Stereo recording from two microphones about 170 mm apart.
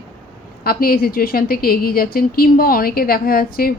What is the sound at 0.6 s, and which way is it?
A woman's voice, 60° left (ahead or behind).